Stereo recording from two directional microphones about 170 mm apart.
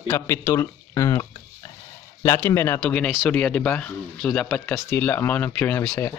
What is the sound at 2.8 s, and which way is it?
Speech, 5° left (ahead or behind).